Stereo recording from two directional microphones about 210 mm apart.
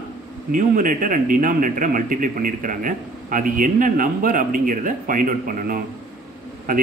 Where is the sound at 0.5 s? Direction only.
40° right (ahead or behind).